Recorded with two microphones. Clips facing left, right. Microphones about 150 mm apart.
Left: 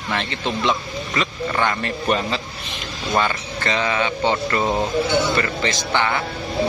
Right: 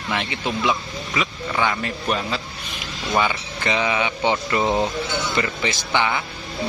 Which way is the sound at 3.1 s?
10° right (ahead or behind).